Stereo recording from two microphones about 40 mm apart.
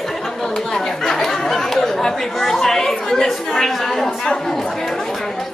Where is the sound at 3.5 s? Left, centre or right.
Centre.